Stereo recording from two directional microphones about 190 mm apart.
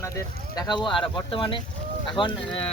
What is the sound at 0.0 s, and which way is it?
Speech, 15° left (ahead or behind).